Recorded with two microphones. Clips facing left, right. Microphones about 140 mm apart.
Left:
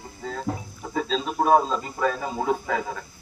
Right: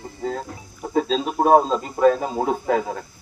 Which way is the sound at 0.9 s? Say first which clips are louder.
Right 5 dB; 40° right (ahead or behind).